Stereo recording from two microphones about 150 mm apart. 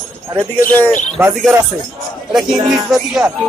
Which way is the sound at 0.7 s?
10° left (ahead or behind).